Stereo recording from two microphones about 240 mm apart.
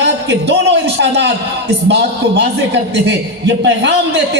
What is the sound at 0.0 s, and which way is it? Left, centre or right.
A man's voice, right.